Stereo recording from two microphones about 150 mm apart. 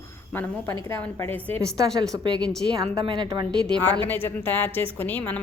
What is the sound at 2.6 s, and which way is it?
Speech, 30° right (ahead or behind).